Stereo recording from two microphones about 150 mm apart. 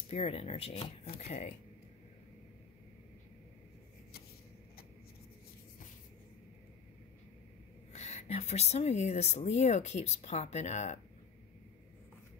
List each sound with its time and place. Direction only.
0.1 s speech: 45° left (ahead or behind)
7.9 s speech: 45° left (ahead or behind)